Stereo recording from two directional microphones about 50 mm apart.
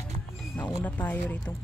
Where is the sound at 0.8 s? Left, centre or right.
Left.